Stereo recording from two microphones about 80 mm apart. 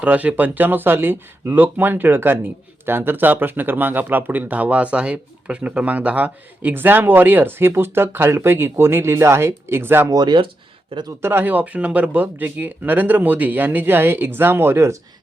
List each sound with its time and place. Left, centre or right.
0.0 s speech: centre
10.1 s speech: right
11.2 s speech: right